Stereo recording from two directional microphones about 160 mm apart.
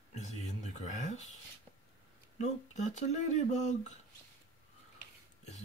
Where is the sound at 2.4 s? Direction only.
45° left (ahead or behind).